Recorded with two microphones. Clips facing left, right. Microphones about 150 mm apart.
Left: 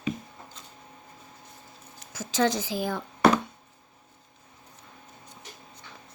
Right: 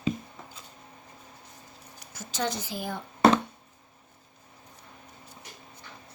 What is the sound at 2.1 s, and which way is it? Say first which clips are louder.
Speech: left 6 dB; 90° left.